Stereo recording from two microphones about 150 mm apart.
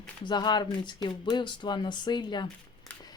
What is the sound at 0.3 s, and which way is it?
Speech, 30° left (ahead or behind).